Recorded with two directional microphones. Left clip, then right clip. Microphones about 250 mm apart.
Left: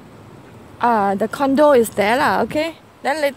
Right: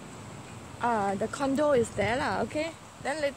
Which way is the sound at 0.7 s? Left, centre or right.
Left.